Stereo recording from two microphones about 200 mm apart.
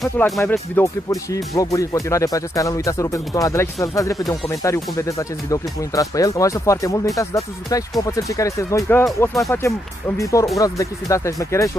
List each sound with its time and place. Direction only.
0.2 s speech: 10° left (ahead or behind)